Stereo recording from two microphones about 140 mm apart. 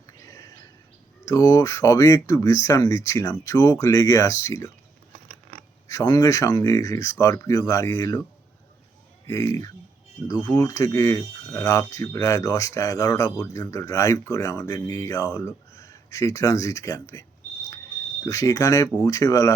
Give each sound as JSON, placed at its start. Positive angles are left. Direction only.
{"t": 0.3, "sound": "a sound", "side_deg": 20}
{"t": 1.2, "sound": "speech", "side_deg": 25}
{"t": 5.9, "sound": "speech", "side_deg": 25}
{"t": 9.2, "sound": "speech", "side_deg": 25}
{"t": 18.3, "sound": "speech", "side_deg": 25}